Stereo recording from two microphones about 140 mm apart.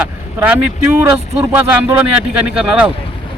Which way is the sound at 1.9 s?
10° right (ahead or behind).